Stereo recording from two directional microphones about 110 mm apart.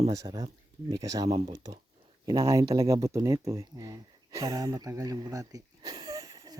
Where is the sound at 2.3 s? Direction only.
30° right (ahead or behind).